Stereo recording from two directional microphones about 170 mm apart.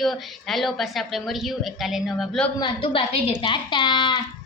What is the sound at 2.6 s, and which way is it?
A woman's voice, 30° left (ahead or behind).